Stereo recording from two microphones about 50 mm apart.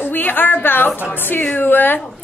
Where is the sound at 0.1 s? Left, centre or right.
Left.